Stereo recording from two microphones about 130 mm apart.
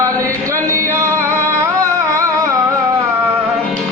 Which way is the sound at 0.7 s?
20° right (ahead or behind).